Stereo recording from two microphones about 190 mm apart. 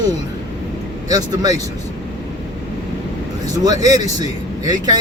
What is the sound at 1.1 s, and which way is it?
Speech, 20° right (ahead or behind).